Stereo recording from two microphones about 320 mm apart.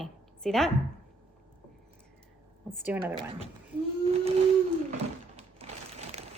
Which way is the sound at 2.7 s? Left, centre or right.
Centre.